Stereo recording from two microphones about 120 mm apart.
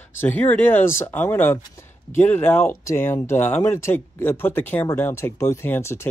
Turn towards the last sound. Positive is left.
turn(degrees=20)  # may be behind; listen again after turning